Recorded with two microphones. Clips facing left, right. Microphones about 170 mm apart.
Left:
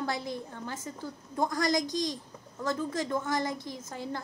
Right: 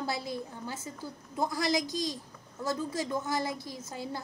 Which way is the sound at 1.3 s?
10° right (ahead or behind).